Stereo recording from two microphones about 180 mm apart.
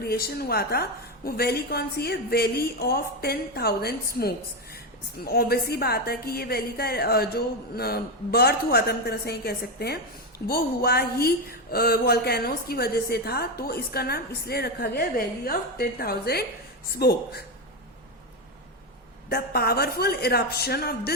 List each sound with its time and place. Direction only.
0.0 s a woman's voice: 60° left (ahead or behind)
19.3 s a woman's voice: 60° left (ahead or behind)